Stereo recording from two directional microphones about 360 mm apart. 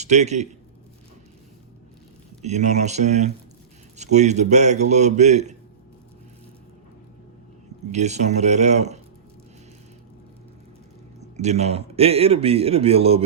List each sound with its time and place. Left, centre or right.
0.0 s a man's voice: centre
2.4 s a man's voice: centre
7.9 s a man's voice: centre
11.3 s a man's voice: centre